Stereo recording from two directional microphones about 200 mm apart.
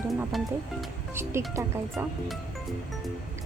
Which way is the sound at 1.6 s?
15° right (ahead or behind).